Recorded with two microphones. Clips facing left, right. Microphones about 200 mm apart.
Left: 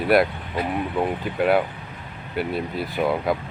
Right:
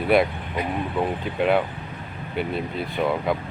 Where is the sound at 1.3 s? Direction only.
5° left (ahead or behind).